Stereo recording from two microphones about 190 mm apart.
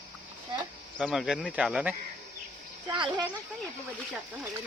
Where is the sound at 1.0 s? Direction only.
Centre (ahead or behind).